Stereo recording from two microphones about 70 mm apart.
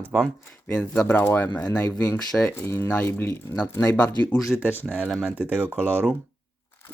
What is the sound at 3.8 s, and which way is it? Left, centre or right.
Speech, left.